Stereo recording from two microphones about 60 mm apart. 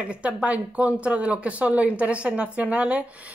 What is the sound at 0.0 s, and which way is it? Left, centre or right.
A woman's voice, right.